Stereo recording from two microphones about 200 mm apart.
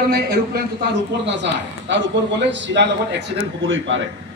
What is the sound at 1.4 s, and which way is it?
A man's voice, 65° right (ahead or behind).